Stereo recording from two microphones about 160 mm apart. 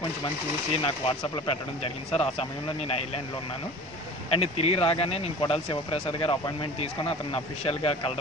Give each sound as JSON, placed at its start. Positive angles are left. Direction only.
{"t": 0.8, "sound": "speech", "side_deg": 30}
{"t": 4.3, "sound": "speech", "side_deg": 40}